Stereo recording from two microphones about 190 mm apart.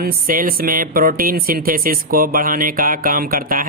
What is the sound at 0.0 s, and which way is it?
Speech, 50° right (ahead or behind).